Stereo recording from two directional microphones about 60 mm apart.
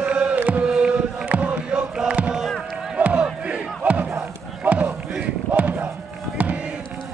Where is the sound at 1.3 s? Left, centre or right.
Right.